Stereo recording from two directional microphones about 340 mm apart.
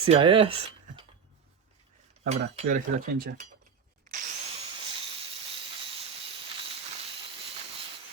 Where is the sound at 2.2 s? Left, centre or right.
Right.